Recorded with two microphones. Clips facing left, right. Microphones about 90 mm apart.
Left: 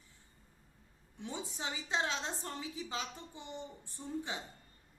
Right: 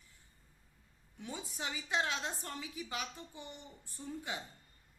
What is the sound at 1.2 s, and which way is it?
A woman's voice, 25° left (ahead or behind).